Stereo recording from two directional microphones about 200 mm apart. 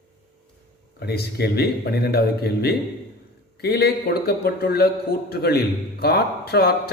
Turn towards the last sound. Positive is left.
turn(degrees=50)  # may be behind; listen again after turning